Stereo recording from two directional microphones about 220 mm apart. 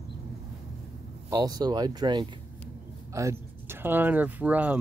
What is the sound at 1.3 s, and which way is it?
Speech, 15° right (ahead or behind).